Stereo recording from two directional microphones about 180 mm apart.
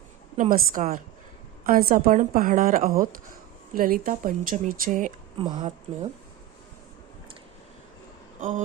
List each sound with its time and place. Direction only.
0.5 s a woman's voice: 50° right (ahead or behind)
5.4 s speech: 25° right (ahead or behind)
8.4 s a sound: 45° right (ahead or behind)